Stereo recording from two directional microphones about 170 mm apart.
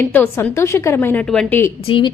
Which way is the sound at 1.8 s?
30° left (ahead or behind).